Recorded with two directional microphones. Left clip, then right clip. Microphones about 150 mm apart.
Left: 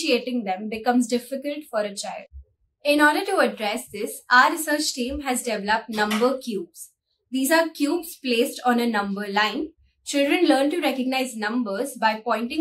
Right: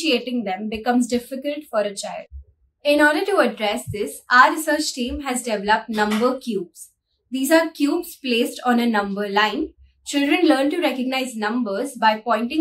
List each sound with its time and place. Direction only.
0.0 s a woman's voice: 10° right (ahead or behind)